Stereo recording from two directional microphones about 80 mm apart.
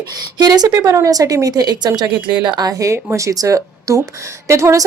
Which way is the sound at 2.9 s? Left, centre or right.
Right.